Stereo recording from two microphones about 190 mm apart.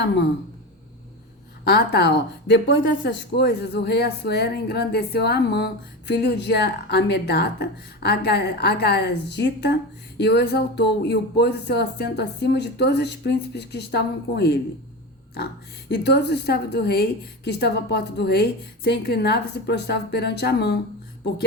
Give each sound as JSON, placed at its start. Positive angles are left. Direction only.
{"t": 1.6, "sound": "a woman's voice", "side_deg": 60}
{"t": 15.9, "sound": "a woman's voice", "side_deg": 65}